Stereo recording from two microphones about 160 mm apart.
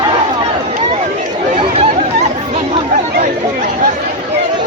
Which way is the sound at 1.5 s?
35° right (ahead or behind).